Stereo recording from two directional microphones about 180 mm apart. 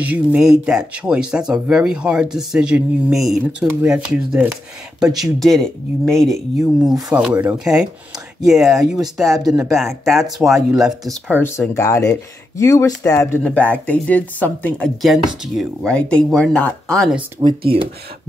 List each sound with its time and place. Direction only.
0.0 s speech: 10° right (ahead or behind)
11.3 s speech: 10° left (ahead or behind)
13.4 s speech: 5° left (ahead or behind)
17.4 s speech: 25° right (ahead or behind)